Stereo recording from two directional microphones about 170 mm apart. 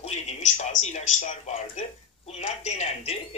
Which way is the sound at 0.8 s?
45° left (ahead or behind).